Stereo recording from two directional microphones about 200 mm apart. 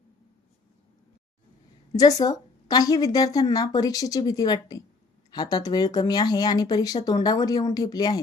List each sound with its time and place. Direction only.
1.9 s speech: 20° left (ahead or behind)